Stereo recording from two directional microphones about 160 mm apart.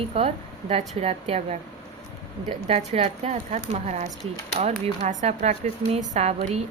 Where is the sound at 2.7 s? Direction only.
40° right (ahead or behind).